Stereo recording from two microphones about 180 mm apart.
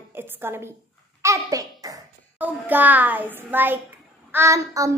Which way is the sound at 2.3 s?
10° right (ahead or behind).